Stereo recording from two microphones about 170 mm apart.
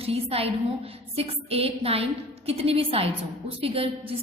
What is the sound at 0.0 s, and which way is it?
A woman's voice, 35° right (ahead or behind).